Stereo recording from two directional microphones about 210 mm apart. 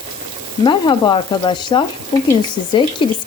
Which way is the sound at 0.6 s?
20° left (ahead or behind).